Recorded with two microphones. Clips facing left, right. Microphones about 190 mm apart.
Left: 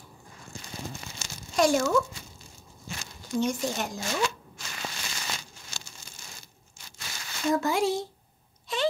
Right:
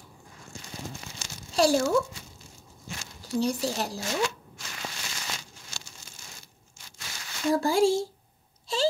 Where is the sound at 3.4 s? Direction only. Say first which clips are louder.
Right 1 dB; 35° right (ahead or behind).